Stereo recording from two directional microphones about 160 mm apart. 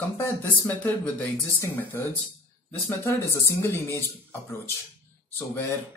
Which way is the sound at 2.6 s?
10° left (ahead or behind).